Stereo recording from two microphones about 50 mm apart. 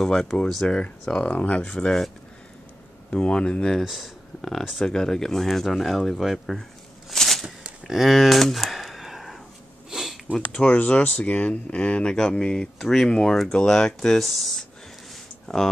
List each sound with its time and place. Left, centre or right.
0.0 s speech: centre
1.2 s speech: left
3.1 s speech: left
3.8 s speech: centre
4.4 s speech: centre
7.1 s a sound: centre
9.8 s sniff: centre
10.3 s speech: centre
10.7 s speech: left; by 14.3 s centre
15.4 s speech: centre